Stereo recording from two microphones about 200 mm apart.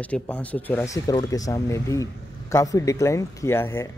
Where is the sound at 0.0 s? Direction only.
5° left (ahead or behind).